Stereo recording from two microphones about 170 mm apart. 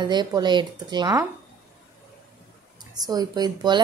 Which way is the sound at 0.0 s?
25° right (ahead or behind).